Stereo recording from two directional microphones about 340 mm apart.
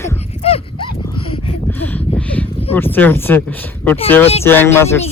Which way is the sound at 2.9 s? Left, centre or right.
Centre.